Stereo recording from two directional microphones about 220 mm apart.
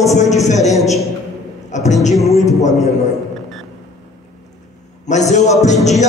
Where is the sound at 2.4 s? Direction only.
15° left (ahead or behind).